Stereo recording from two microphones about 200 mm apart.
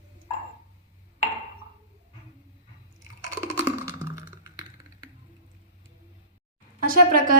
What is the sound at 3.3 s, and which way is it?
Wood block, 15° right (ahead or behind).